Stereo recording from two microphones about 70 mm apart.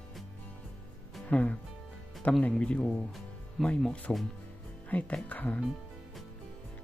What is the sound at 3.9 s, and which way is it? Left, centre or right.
Speech, left.